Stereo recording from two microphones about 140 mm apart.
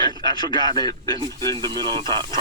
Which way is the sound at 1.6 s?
30° right (ahead or behind).